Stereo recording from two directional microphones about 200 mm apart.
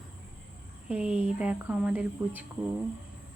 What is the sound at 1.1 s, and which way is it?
Speech, 30° left (ahead or behind).